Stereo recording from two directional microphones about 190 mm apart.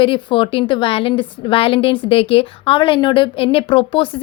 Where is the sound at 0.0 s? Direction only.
25° left (ahead or behind).